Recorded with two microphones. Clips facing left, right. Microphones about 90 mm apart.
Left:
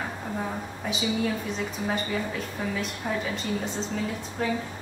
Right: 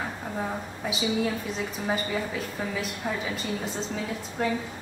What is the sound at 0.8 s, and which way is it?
A woman's voice, centre (ahead or behind).